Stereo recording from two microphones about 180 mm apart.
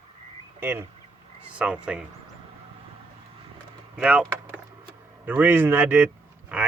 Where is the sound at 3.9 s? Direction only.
5° right (ahead or behind).